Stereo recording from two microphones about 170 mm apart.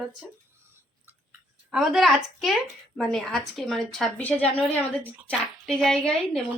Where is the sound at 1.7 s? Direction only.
5° right (ahead or behind).